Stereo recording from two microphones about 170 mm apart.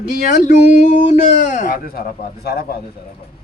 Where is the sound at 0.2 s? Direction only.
50° left (ahead or behind).